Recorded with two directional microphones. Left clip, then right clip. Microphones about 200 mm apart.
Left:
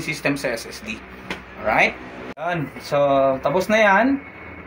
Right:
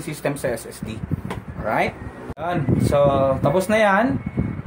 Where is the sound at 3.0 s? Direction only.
55° right (ahead or behind).